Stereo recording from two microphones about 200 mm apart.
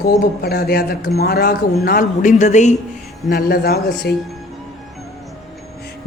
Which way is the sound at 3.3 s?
50° left (ahead or behind).